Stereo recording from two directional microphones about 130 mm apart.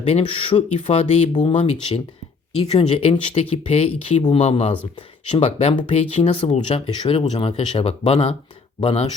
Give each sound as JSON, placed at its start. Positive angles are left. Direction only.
{"t": 0.0, "sound": "speech", "side_deg": 45}
{"t": 1.5, "sound": "speech", "side_deg": 60}